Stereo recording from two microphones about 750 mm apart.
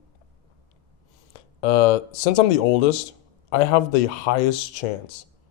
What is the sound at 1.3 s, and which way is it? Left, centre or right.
Speech, left.